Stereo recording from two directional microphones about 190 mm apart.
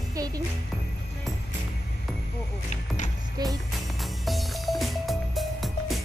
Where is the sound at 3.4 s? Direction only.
20° right (ahead or behind).